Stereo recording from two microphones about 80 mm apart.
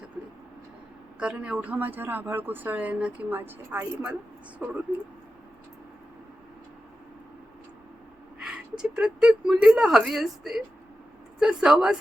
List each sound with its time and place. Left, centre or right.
1.2 s speech: centre; by 4.8 s right
8.4 s a woman's voice: centre